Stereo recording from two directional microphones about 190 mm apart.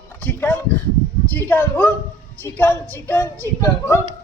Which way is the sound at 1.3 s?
10° left (ahead or behind).